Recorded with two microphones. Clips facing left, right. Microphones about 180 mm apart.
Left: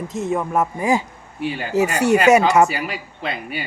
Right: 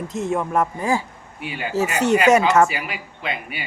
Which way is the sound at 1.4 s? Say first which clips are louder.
Left 4 dB; 40° left (ahead or behind).